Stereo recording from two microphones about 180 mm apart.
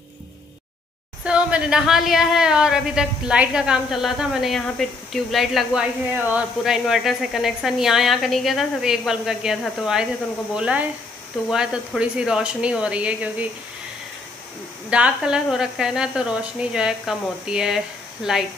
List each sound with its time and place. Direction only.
1.2 s speech: 5° right (ahead or behind)
14.9 s speech: 5° right (ahead or behind)